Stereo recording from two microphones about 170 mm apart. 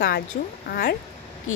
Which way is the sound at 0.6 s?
65° left (ahead or behind).